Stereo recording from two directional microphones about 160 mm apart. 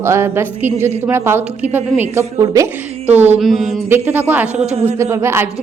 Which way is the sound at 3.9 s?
10° right (ahead or behind).